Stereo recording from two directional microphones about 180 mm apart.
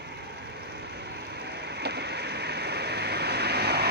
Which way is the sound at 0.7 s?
65° right (ahead or behind).